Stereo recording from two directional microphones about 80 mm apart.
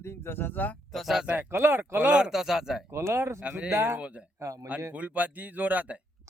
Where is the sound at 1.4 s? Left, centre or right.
Right.